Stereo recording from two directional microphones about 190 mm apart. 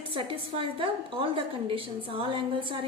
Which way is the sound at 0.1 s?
30° right (ahead or behind).